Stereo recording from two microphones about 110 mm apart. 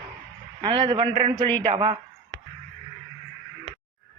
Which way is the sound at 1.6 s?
55° right (ahead or behind).